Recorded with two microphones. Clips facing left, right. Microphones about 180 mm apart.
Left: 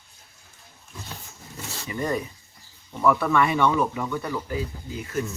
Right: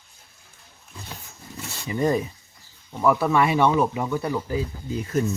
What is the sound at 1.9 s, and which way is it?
Speech, 30° right (ahead or behind).